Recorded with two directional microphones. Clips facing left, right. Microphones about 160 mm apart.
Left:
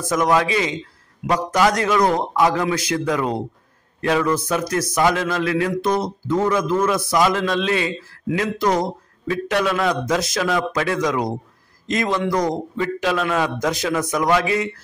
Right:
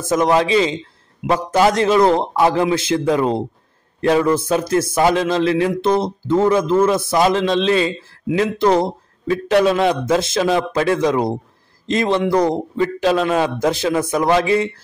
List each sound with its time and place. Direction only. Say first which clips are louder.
0.0 s a man's voice: right 3 dB; 25° right (ahead or behind)